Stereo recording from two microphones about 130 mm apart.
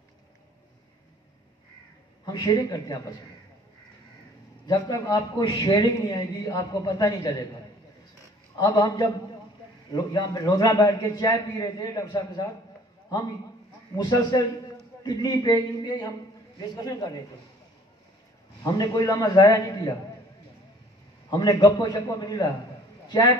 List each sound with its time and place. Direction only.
2.2 s a man's voice: 30° left (ahead or behind)
4.6 s a man's voice: 30° left (ahead or behind)
8.5 s a man's voice: 30° left (ahead or behind)
13.9 s a man's voice: 30° left (ahead or behind)
18.6 s a man's voice: 30° left (ahead or behind)
21.3 s a man's voice: 35° left (ahead or behind)
23.0 s a sound: 35° left (ahead or behind)